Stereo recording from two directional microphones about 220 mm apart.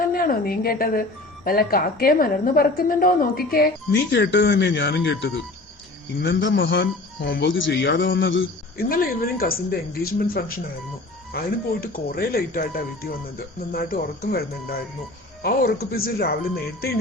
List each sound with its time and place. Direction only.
0.1 s a woman's voice: 40° left (ahead or behind); by 8.4 s 55° left (ahead or behind)
8.8 s a woman's voice: 40° left (ahead or behind)